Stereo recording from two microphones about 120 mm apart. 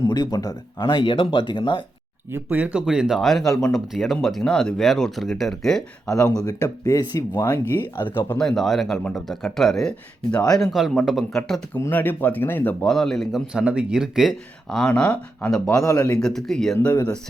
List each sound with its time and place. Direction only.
0.1 s speech: 35° left (ahead or behind)
2.3 s speech: 15° right (ahead or behind); by 6.1 s centre (ahead or behind)
6.1 s speech: 30° left (ahead or behind)
8.0 s speech: 15° left (ahead or behind)
8.4 s speech: 5° left (ahead or behind)
11.8 s speech: 15° left (ahead or behind)
12.9 s speech: 5° left (ahead or behind)
15.8 s speech: 25° left (ahead or behind)
16.0 s speech: 5° left (ahead or behind)